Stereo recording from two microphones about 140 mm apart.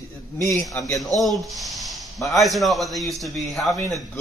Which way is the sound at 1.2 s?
Centre (ahead or behind).